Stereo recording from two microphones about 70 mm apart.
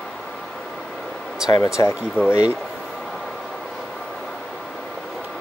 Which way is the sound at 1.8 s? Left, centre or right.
Left.